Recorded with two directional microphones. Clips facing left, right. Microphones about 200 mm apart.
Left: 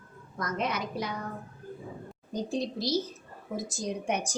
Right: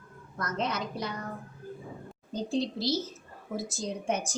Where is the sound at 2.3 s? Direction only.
15° left (ahead or behind).